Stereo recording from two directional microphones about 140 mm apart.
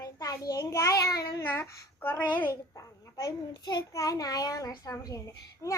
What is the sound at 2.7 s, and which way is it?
A child's voice, 25° left (ahead or behind).